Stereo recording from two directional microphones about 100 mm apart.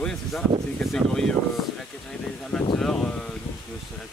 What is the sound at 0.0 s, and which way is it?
Speech, 5° left (ahead or behind).